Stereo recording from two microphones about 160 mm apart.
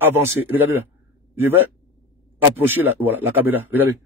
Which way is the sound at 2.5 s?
10° right (ahead or behind).